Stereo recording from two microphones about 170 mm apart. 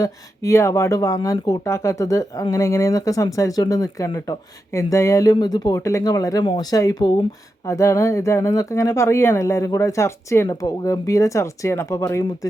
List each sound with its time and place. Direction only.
0.0 s speech: 15° left (ahead or behind)